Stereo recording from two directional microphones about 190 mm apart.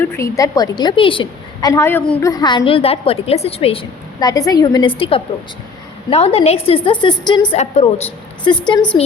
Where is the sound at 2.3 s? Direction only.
20° left (ahead or behind).